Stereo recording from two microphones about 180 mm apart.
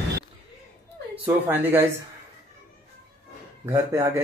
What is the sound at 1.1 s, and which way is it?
Speech, 10° right (ahead or behind).